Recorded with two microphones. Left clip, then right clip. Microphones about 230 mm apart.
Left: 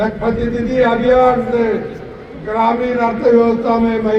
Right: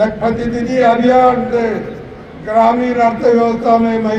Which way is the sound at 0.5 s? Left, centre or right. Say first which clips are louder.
Right 3 dB; right.